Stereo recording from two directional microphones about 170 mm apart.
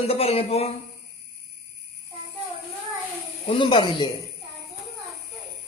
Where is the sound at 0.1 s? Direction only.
35° left (ahead or behind).